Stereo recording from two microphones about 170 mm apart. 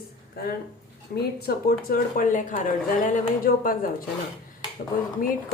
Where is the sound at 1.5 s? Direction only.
60° left (ahead or behind).